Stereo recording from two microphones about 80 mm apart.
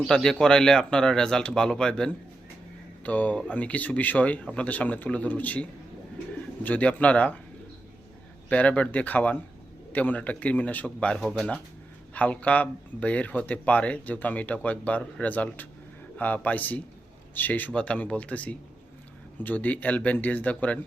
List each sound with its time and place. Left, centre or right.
0.1 s speech: centre
8.4 s speech: centre